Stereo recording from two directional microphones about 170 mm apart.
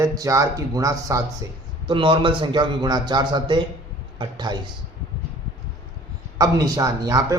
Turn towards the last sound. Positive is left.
turn(degrees=-20)  # may be behind; listen again after turning